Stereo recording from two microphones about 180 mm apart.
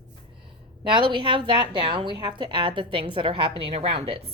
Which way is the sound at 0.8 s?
25° right (ahead or behind).